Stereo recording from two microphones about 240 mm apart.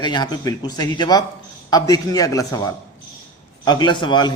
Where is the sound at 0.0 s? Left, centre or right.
Centre.